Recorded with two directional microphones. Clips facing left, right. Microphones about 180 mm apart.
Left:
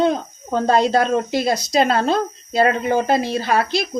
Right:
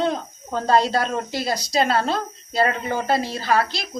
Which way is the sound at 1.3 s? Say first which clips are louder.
Left 2 dB; 25° left (ahead or behind).